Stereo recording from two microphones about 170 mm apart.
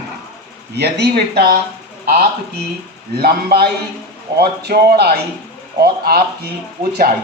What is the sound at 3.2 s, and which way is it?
Speech, 65° right (ahead or behind).